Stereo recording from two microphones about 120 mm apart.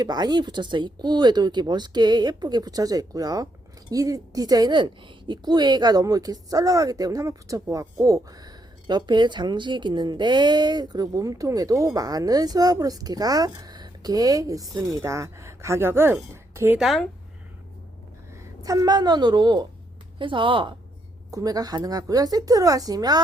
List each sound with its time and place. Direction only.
0.0 s speech: 35° right (ahead or behind); by 16.1 s 20° right (ahead or behind)
16.3 s a sound: 25° right (ahead or behind)
16.7 s speech: centre (ahead or behind)
18.6 s speech: 30° right (ahead or behind)
21.2 s speech: 30° right (ahead or behind)